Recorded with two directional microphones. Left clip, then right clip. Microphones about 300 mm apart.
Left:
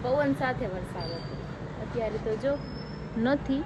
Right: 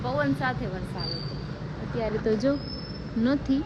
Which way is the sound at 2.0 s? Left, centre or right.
Centre.